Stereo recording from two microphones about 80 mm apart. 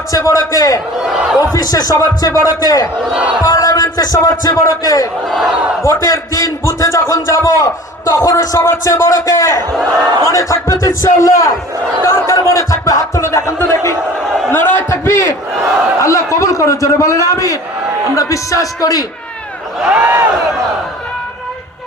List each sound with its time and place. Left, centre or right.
0.1 s speech: left
1.0 s speech: centre
1.5 s speech: left
3.0 s speech: centre
3.4 s speech: left
5.3 s speech: centre
5.8 s speech: left
9.9 s a man's voice: right
10.2 s speech: left
20.0 s speech: right